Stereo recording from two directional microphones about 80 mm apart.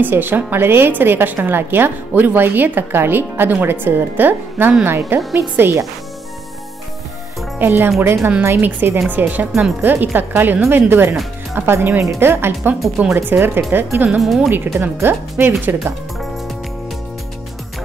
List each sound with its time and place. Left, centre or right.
0.0 s a woman's voice: right
7.5 s a woman's voice: right
13.9 s speech: centre
14.2 s speech: centre
14.5 s a woman's voice: right